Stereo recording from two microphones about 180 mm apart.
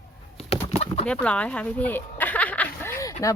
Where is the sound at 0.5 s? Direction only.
35° left (ahead or behind).